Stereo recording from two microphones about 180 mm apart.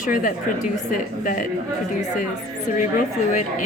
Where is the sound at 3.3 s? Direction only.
45° left (ahead or behind).